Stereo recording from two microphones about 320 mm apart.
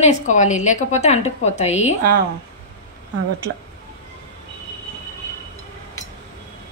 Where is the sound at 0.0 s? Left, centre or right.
Left.